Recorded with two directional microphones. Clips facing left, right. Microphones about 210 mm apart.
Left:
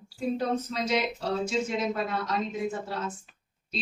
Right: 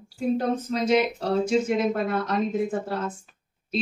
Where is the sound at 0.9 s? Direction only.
50° right (ahead or behind).